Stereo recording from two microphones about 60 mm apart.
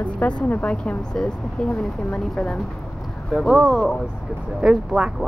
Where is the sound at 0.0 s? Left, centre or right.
Left.